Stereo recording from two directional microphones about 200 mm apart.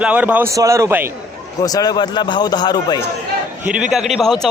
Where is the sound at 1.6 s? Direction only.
20° left (ahead or behind).